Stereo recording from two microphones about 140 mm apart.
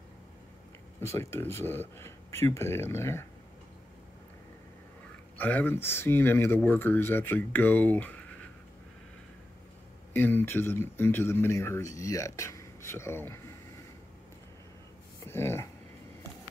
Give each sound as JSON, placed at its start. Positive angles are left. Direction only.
{"t": 1.0, "sound": "speech", "side_deg": 20}
{"t": 5.4, "sound": "speech", "side_deg": 10}
{"t": 10.1, "sound": "speech", "side_deg": 15}
{"t": 15.2, "sound": "speech", "side_deg": 15}